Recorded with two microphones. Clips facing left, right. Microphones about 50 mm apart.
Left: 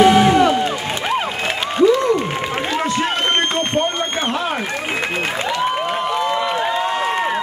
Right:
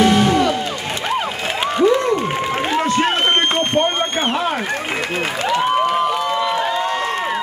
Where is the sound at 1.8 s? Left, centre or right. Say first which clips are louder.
Left 1 dB; right.